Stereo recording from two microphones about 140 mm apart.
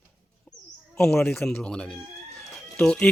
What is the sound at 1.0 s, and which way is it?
Speech, 5° left (ahead or behind).